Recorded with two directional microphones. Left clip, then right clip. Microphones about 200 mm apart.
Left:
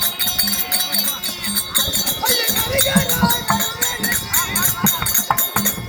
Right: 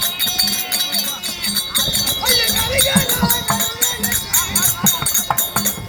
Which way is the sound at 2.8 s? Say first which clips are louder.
Right 1 dB; 40° right (ahead or behind).